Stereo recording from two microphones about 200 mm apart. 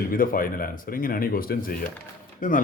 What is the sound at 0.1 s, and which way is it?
Speech, 45° left (ahead or behind).